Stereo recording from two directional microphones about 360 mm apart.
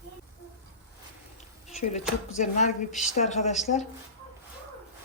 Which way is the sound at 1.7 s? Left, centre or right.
Centre.